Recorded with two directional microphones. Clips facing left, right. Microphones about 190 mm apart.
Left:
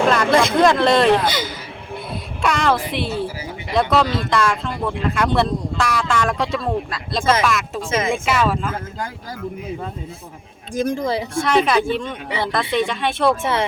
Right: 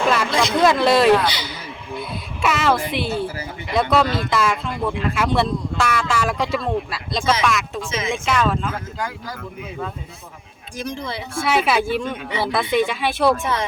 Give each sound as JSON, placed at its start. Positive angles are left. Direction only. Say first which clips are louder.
{"t": 0.3, "sound": "speech", "louder": "left 5 dB", "side_deg": 55}
{"t": 0.6, "sound": "speech", "louder": "right 2 dB", "side_deg": -5}
{"t": 1.2, "sound": "a sound", "louder": "left 2 dB", "side_deg": 50}
{"t": 2.0, "sound": "speech", "louder": "even", "side_deg": -5}
{"t": 7.9, "sound": "speech", "louder": "left 6 dB", "side_deg": 50}
{"t": 8.1, "sound": "speech", "louder": "right 2 dB", "side_deg": 5}
{"t": 10.8, "sound": "speech", "louder": "left 8 dB", "side_deg": 50}
{"t": 11.4, "sound": "speech", "louder": "left 1 dB", "side_deg": -5}
{"t": 13.3, "sound": "speech", "louder": "left 2 dB", "side_deg": 25}